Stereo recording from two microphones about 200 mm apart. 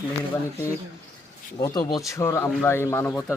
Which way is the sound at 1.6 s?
20° left (ahead or behind).